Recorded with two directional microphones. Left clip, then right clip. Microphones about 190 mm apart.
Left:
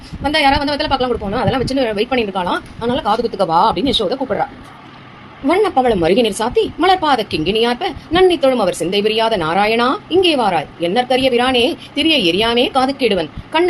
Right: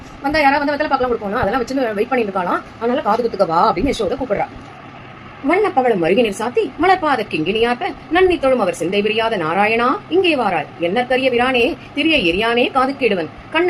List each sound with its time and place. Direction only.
0.2 s a woman's voice: 40° left (ahead or behind)
2.3 s speech: 35° left (ahead or behind)
5.5 s a woman's voice: 55° left (ahead or behind)
10.3 s a woman's voice: 40° left (ahead or behind)
10.6 s a woman's voice: 55° left (ahead or behind)